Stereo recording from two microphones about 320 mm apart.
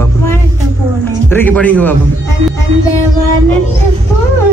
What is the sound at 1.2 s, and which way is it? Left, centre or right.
Speech, centre.